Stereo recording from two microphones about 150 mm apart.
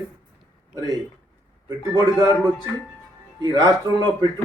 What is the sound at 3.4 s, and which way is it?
Speech, 25° right (ahead or behind).